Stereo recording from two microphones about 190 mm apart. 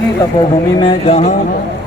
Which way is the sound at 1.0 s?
35° left (ahead or behind).